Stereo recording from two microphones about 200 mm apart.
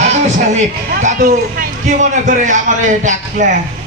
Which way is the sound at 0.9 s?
45° right (ahead or behind).